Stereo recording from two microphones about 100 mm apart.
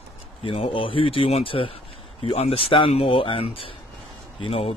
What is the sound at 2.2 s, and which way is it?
Speech, 80° left.